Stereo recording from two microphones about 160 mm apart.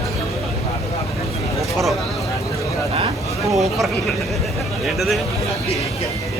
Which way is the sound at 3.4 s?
Centre (ahead or behind).